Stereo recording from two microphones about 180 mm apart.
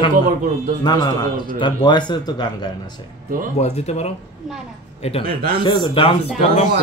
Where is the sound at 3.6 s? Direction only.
35° left (ahead or behind).